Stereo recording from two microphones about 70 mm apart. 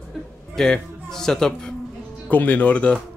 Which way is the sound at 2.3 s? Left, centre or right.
Left.